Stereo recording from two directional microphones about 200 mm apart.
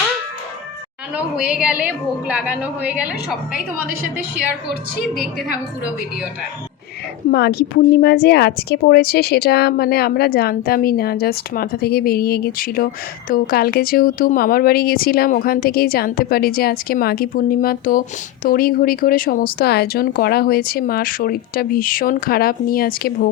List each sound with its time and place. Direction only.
1.5 s a woman's voice: 5° right (ahead or behind)
4.9 s a woman's voice: 50° left (ahead or behind)
7.3 s a woman's voice: 55° left (ahead or behind)